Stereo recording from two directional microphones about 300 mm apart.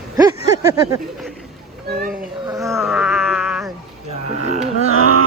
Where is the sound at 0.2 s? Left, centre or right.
Centre.